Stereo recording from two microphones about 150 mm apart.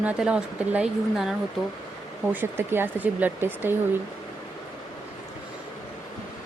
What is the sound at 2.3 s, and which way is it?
A woman's voice, 15° right (ahead or behind).